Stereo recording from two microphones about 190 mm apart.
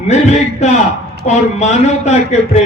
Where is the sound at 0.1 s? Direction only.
35° left (ahead or behind).